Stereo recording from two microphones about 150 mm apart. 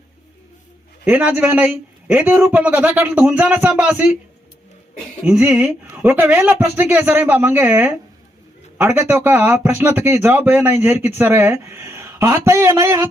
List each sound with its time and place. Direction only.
1.0 s speech: 15° right (ahead or behind)
5.2 s speech: 5° right (ahead or behind)
9.0 s speech: 15° right (ahead or behind)